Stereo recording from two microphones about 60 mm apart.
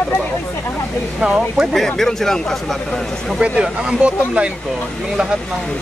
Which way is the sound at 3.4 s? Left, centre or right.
Centre.